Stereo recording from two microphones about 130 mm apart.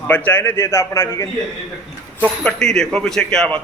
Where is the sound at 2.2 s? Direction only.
5° left (ahead or behind).